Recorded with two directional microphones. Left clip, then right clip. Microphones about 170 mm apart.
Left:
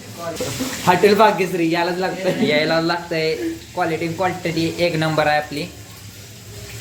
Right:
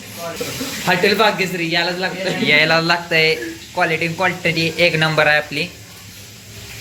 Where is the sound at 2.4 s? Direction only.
5° left (ahead or behind).